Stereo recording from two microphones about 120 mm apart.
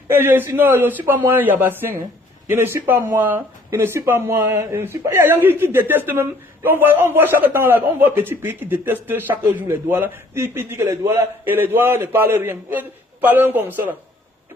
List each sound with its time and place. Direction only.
0.1 s speech: 15° right (ahead or behind)